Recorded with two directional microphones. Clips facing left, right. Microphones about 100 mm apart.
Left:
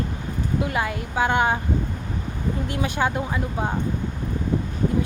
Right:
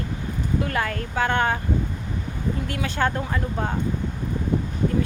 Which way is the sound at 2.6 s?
20° left (ahead or behind).